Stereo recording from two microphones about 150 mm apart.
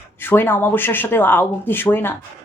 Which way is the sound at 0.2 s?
15° left (ahead or behind).